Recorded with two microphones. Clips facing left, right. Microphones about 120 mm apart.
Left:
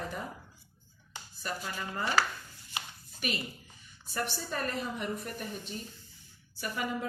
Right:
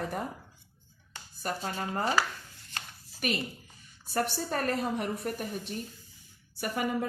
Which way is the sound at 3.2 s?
50° right (ahead or behind).